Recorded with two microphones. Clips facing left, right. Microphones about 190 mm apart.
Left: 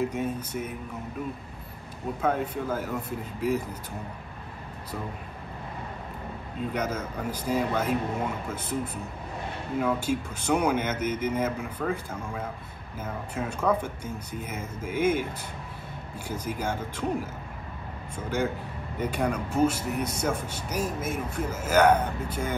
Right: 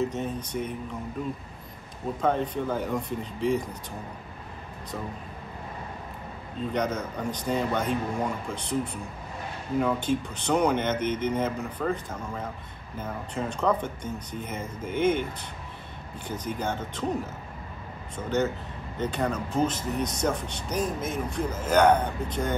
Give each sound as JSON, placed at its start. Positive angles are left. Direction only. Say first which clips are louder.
{"t": 0.0, "sound": "speech", "louder": "even", "side_deg": 10}
{"t": 2.2, "sound": "speech", "louder": "right 1 dB", "side_deg": 5}
{"t": 6.7, "sound": "speech", "louder": "right 3 dB", "side_deg": 5}
{"t": 16.3, "sound": "speech", "louder": "even", "side_deg": 10}
{"t": 18.1, "sound": "speech", "louder": "right 2 dB", "side_deg": 10}